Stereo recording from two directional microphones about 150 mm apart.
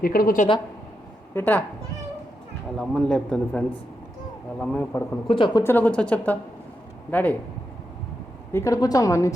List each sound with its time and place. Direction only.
0.0 s a woman's voice: 75° left (ahead or behind)
1.3 s speech: 10° left (ahead or behind)
2.7 s a man's voice: 5° left (ahead or behind)
4.6 s speech: 10° left (ahead or behind)
5.3 s speech: 35° left (ahead or behind)
5.6 s speech: 10° left (ahead or behind)
8.5 s a woman's voice: 20° left (ahead or behind)